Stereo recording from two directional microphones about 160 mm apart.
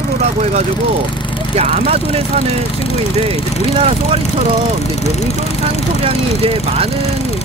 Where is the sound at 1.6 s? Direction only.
40° right (ahead or behind).